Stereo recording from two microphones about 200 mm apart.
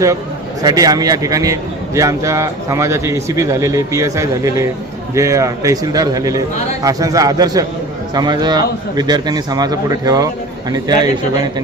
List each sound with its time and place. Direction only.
0.6 s a man's voice: 20° right (ahead or behind)